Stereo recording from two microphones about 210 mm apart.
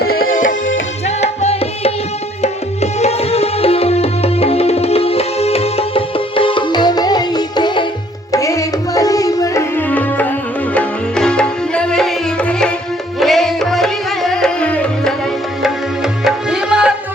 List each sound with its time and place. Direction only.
0.0 s music: 45° left (ahead or behind)
1.0 s music: 30° left (ahead or behind)
2.4 s tabla: 30° left (ahead or behind)
8.3 s music: 15° left (ahead or behind)
16.2 s music: 5° right (ahead or behind)